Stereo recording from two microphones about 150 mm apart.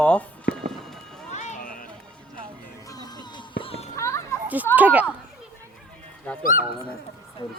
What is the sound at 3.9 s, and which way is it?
Children playing, 20° left (ahead or behind).